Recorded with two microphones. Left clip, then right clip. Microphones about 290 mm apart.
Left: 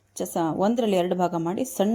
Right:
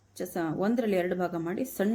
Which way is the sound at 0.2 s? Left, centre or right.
Left.